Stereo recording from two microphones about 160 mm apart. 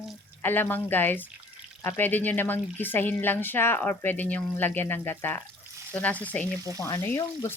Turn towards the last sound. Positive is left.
turn(degrees=20)  # may be behind; listen again after turning